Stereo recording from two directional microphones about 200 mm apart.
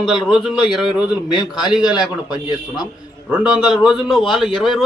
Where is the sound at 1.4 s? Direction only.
20° left (ahead or behind).